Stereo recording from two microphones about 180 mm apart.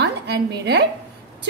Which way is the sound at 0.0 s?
70° right (ahead or behind).